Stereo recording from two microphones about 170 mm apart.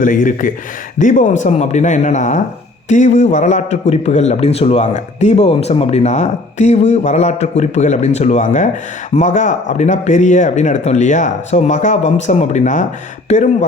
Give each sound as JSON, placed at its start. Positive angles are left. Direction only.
{"t": 0.0, "sound": "a man's voice", "side_deg": 50}